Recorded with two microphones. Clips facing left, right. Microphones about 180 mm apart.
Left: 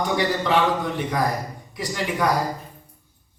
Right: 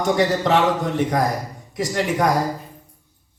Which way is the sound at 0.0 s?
45° right (ahead or behind).